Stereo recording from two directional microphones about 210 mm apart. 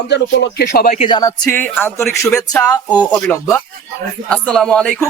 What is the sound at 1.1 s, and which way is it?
A man's voice, 15° left (ahead or behind).